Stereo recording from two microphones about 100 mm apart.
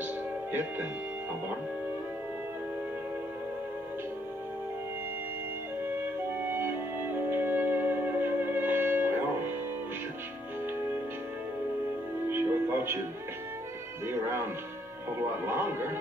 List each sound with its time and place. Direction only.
0.0 s music: 20° right (ahead or behind)
6.3 s music: 20° right (ahead or behind)
12.3 s music: 25° right (ahead or behind)
14.0 s music: 25° right (ahead or behind)